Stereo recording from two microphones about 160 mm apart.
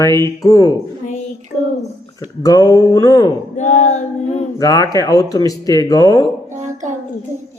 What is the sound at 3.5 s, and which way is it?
Female singing, 50° left (ahead or behind).